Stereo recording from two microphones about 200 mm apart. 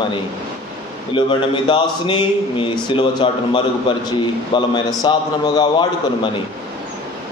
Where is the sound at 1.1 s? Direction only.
25° left (ahead or behind).